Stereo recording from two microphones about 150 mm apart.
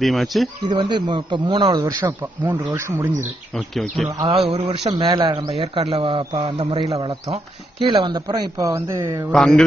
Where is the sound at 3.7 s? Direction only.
Centre (ahead or behind).